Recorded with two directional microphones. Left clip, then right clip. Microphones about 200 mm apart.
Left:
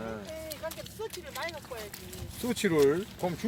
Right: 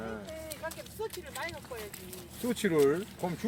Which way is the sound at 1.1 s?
5° left (ahead or behind).